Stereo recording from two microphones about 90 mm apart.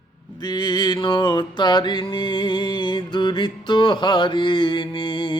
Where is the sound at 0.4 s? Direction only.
55° left (ahead or behind).